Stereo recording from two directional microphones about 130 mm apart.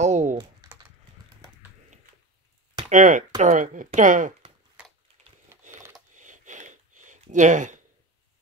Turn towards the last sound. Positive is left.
turn(degrees=-70)  # may be behind; listen again after turning